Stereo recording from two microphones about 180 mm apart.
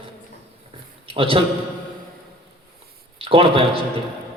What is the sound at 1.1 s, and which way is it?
Speech, 30° right (ahead or behind).